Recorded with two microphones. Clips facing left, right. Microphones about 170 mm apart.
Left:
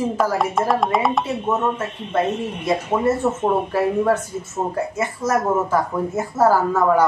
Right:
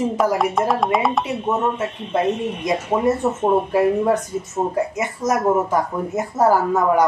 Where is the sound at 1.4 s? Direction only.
15° right (ahead or behind).